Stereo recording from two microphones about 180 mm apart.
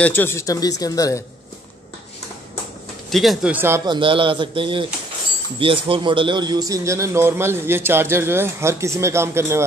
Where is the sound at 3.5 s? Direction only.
15° right (ahead or behind).